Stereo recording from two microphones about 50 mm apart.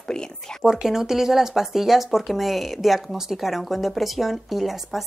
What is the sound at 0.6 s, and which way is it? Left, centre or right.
Speech, centre.